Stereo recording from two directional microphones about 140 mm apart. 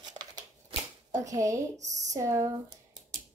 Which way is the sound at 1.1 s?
25° right (ahead or behind).